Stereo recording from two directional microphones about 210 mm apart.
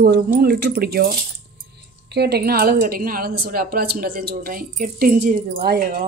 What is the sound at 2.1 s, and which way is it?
A woman's voice, 50° right (ahead or behind).